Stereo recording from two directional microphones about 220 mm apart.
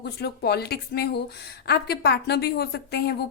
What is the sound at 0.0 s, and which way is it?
Speech, 45° left (ahead or behind).